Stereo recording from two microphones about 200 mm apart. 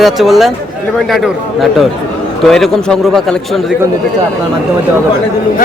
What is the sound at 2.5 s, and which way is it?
Speech, 5° left (ahead or behind).